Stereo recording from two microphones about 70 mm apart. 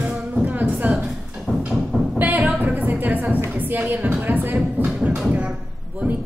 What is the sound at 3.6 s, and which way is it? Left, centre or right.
Speech, right.